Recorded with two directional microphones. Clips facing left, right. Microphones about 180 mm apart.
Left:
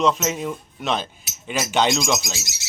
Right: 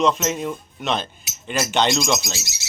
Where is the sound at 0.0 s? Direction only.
5° left (ahead or behind).